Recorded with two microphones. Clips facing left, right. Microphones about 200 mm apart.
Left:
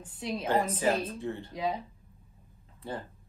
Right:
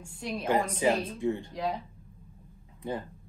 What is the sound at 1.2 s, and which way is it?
Speech, 15° right (ahead or behind).